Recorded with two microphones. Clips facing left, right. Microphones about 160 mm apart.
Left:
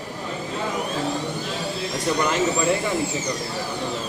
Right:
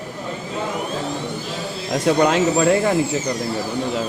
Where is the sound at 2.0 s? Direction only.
90° right.